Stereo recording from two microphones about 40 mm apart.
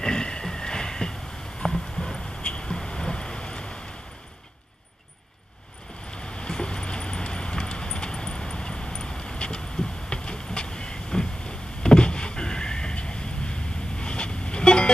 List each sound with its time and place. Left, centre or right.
0.0 s a sound: centre
1.6 s clip-clop: centre
2.4 s vehicle: left
6.1 s vehicle: left